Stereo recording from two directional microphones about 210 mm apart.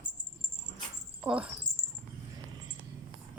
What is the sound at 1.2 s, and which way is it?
Speech, 5° right (ahead or behind).